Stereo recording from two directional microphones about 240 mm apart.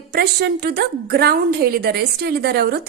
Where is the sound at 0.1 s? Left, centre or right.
Right.